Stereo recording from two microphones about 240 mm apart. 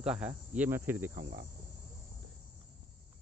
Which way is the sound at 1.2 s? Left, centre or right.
Right.